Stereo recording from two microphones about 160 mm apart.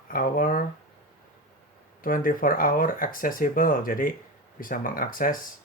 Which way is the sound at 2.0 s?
65° left (ahead or behind).